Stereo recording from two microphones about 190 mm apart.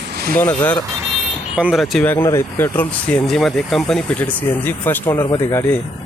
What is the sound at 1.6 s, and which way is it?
Speech, 5° right (ahead or behind).